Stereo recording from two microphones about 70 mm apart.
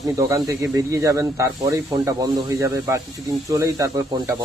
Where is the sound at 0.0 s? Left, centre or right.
Right.